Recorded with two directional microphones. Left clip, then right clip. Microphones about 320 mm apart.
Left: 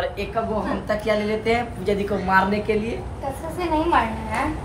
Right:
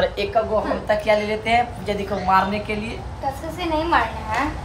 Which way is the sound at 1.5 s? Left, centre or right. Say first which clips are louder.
Right 3 dB; right.